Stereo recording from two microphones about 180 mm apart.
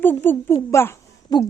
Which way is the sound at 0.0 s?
10° left (ahead or behind).